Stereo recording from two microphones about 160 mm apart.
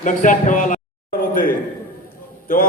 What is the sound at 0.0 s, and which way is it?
Speech, 55° left (ahead or behind).